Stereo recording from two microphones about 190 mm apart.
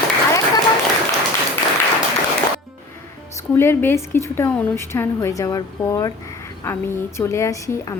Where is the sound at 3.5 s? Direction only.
10° left (ahead or behind).